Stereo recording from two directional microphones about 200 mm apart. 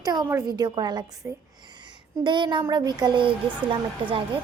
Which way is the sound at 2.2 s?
25° right (ahead or behind).